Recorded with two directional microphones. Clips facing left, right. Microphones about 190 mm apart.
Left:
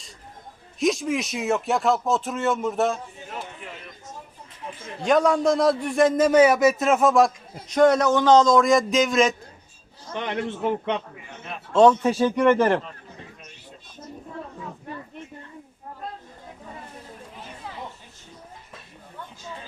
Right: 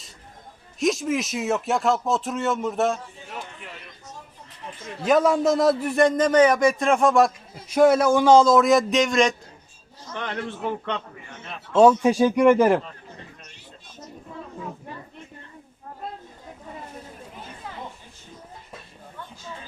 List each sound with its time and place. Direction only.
0.8 s a man's voice: centre (ahead or behind)
4.9 s a man's voice: 5° right (ahead or behind)
10.1 s a man's voice: 15° left (ahead or behind)
11.7 s a man's voice: 10° right (ahead or behind)